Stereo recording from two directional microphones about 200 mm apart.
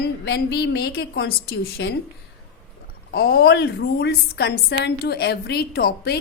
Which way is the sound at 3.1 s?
50° left (ahead or behind).